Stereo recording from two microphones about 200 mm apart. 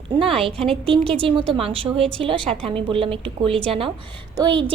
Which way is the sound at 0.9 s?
30° right (ahead or behind).